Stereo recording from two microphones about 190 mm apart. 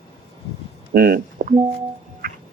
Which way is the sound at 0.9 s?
50° right (ahead or behind).